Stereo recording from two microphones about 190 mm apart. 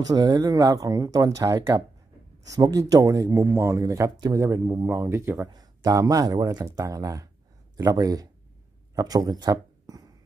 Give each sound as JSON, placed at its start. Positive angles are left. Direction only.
{"t": 0.0, "sound": "speech", "side_deg": -20}